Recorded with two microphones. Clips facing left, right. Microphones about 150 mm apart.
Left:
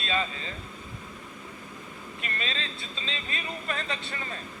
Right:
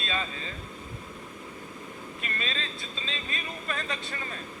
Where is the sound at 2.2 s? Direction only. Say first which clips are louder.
Left 1 dB; 30° left (ahead or behind).